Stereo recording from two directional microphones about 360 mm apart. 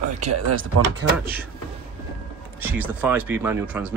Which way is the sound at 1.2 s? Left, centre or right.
Centre.